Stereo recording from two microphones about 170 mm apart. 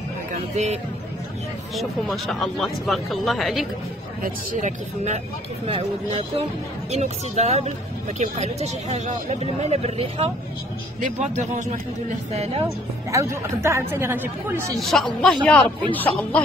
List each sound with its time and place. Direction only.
0.3 s music: 40° right (ahead or behind)
1.8 s speech: centre (ahead or behind)
4.2 s speech: 45° right (ahead or behind)
13.1 s speech: 15° right (ahead or behind)
14.8 s speech: centre (ahead or behind)